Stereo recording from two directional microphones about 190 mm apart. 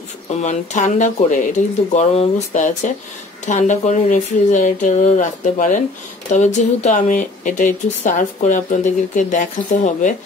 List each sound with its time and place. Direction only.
0.4 s speech: 40° left (ahead or behind)